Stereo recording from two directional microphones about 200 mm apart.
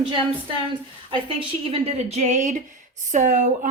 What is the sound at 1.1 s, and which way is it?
Speech, 25° right (ahead or behind).